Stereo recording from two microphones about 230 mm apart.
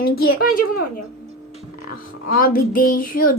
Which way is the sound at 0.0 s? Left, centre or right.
Left.